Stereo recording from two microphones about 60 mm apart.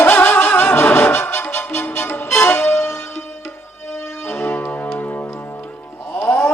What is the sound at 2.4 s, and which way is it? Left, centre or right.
Music, centre.